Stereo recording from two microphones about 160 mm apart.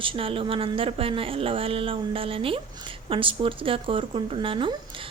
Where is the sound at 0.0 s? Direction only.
35° right (ahead or behind).